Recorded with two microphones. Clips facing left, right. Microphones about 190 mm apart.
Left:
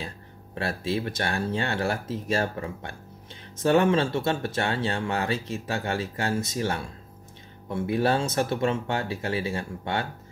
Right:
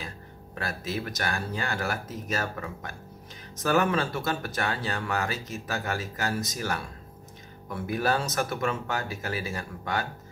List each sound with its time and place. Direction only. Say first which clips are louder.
0.6 s speech: left 4 dB; 30° left (ahead or behind)